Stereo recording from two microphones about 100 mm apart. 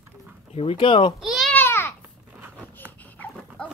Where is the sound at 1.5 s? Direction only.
20° left (ahead or behind).